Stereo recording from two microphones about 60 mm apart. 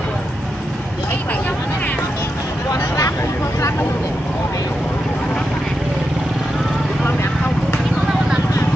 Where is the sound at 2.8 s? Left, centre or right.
Left.